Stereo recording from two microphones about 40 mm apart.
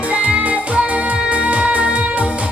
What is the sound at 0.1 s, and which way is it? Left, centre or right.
Music, right.